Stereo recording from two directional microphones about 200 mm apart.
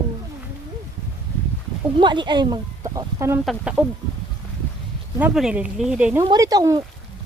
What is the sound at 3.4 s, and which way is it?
Speech, 5° right (ahead or behind).